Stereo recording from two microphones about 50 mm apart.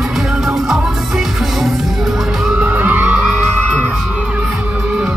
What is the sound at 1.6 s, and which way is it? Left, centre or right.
Music, centre.